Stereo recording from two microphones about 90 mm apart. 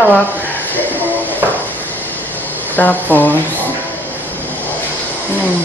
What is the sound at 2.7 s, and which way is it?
Speech, 20° left (ahead or behind).